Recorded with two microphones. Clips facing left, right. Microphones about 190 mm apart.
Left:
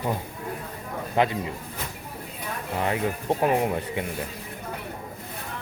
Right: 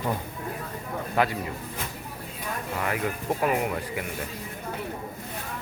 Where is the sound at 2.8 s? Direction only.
30° left (ahead or behind).